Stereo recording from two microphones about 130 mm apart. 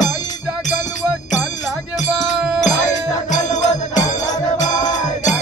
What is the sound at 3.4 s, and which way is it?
Music, 70° left (ahead or behind).